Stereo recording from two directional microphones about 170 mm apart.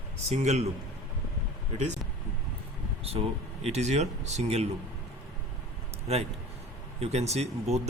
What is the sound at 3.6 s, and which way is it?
Speech, 40° right (ahead or behind).